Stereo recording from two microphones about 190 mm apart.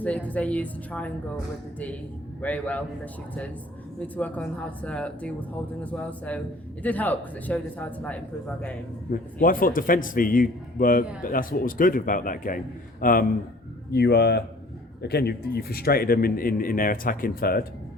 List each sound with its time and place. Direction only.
0.0 s speech: 5° left (ahead or behind)
2.4 s speech: 10° left (ahead or behind)
9.1 s speech: 50° left (ahead or behind)
13.9 s speech: 60° left (ahead or behind)